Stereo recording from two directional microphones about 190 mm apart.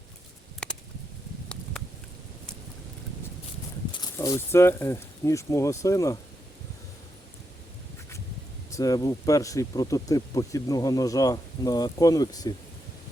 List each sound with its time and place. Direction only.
0.6 s a sound: 5° left (ahead or behind)
3.9 s speech: 20° left (ahead or behind)
8.7 s speech: 20° left (ahead or behind)